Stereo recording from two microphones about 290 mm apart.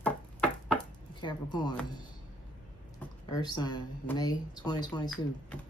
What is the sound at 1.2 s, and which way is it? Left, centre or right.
Speech, centre.